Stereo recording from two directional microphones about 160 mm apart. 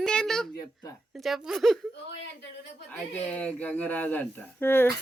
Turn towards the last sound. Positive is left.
turn(degrees=15)  # may be behind; listen again after turning